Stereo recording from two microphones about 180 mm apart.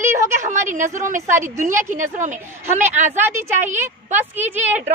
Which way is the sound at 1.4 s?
45° right (ahead or behind).